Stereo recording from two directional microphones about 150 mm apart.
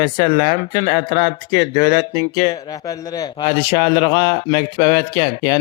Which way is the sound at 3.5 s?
35° left (ahead or behind).